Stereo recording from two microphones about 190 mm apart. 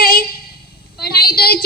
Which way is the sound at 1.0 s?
55° left (ahead or behind).